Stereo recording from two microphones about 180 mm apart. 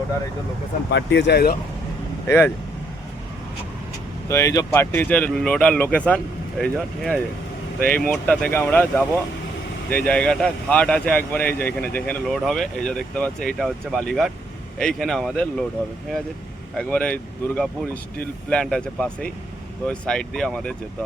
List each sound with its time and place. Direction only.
0.9 s speech: 80° left; by 1.5 s 65° left (ahead or behind)
2.2 s speech: 10° left (ahead or behind)
4.3 s speech: 15° left (ahead or behind)
16.7 s speech: 5° left (ahead or behind)